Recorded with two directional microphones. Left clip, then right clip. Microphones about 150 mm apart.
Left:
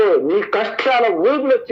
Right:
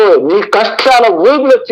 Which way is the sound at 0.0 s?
40° right (ahead or behind).